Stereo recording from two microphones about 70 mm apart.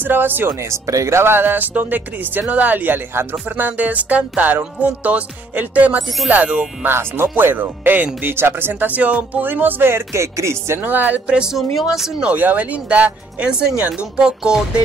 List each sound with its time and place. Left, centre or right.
0.0 s speech: right
0.7 s speech: right; by 6.9 s centre
6.9 s speech: right
10.8 s speech: right